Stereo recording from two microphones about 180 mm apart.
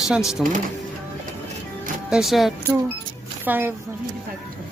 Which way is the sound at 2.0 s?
5° right (ahead or behind).